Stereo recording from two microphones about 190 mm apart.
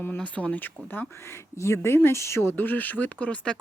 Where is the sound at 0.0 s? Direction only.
10° left (ahead or behind).